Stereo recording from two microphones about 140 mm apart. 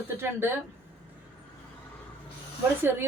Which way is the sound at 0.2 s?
15° right (ahead or behind).